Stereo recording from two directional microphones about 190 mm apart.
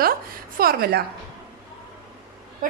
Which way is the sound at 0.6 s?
50° right (ahead or behind).